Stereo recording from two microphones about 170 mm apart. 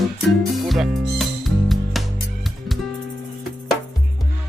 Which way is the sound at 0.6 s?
Centre (ahead or behind).